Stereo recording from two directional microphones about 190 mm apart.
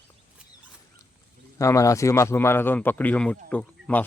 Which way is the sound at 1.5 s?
15° left (ahead or behind).